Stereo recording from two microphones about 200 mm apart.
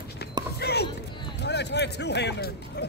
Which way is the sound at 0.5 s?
55° left (ahead or behind).